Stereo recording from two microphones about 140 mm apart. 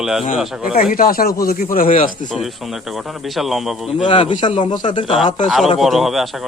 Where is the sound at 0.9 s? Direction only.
90° left.